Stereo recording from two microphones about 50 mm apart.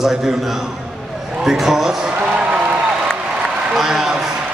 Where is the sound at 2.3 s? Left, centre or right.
Right.